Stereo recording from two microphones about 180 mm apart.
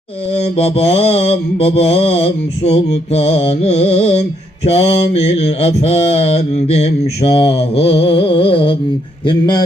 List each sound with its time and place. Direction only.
0.3 s mantra: 35° left (ahead or behind)
9.2 s a man's voice: 25° left (ahead or behind)